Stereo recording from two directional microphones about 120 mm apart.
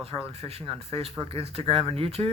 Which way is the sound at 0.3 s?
50° right (ahead or behind).